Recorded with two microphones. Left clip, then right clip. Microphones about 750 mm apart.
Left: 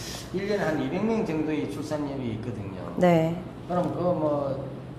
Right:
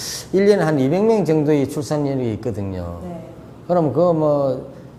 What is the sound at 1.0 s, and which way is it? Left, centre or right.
Speech, right.